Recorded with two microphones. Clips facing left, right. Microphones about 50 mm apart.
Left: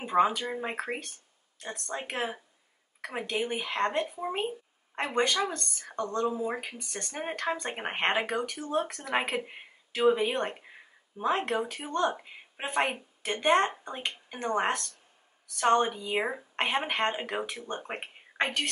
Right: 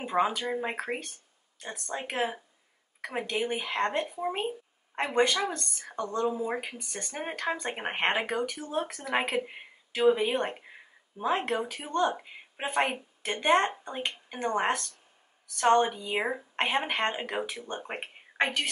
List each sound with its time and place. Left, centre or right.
0.0 s a sound: centre
0.5 s speech: centre
5.0 s a woman's voice: centre
5.9 s a woman's voice: centre